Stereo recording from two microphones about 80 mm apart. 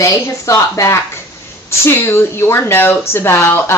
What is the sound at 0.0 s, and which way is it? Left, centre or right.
Speech, left.